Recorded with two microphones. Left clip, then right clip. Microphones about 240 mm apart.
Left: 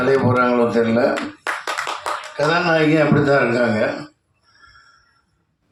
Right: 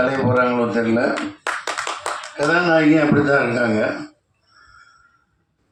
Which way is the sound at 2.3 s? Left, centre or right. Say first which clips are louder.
Right 1 dB; left.